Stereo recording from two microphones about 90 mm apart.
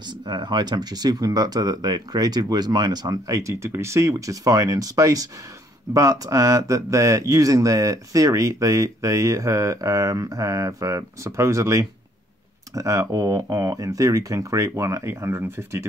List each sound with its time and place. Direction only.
0.3 s speech: 55° right (ahead or behind); by 15.9 s 30° right (ahead or behind)